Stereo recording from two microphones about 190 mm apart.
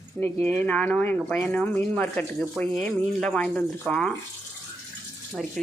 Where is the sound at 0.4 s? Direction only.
5° left (ahead or behind).